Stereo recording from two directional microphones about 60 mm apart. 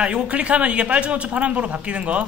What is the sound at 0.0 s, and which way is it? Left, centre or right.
A man's voice, centre.